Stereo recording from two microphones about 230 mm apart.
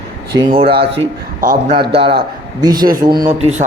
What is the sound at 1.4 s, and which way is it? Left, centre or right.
Speech, right.